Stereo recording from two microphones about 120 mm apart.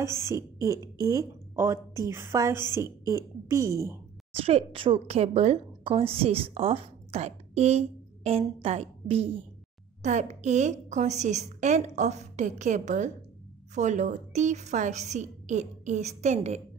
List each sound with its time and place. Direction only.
0.0 s speech: 25° right (ahead or behind)
4.3 s a woman's voice: 55° right (ahead or behind)
10.0 s a woman's voice: 75° right (ahead or behind)